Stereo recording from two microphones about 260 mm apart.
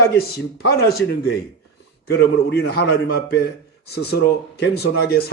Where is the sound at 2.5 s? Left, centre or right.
Left.